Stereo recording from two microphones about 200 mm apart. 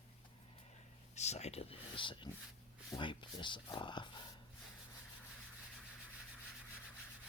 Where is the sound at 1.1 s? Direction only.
35° left (ahead or behind).